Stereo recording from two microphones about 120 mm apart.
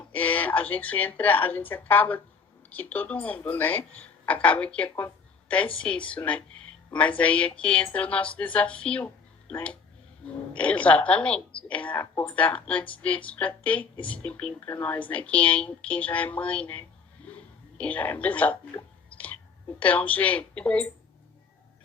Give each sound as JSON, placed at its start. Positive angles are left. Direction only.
{"t": 0.1, "sound": "a woman's voice", "side_deg": 10}